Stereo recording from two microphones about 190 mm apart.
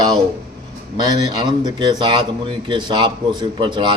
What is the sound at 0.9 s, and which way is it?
Speech, 20° right (ahead or behind).